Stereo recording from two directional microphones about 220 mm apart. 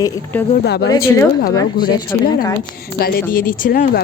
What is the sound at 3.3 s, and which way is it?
Speech, 40° left (ahead or behind).